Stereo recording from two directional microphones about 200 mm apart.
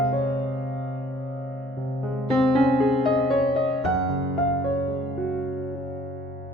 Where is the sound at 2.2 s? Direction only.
Centre (ahead or behind).